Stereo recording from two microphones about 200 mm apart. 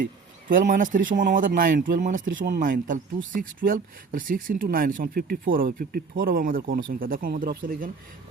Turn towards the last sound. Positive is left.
turn(degrees=-45)  # may be behind; listen again after turning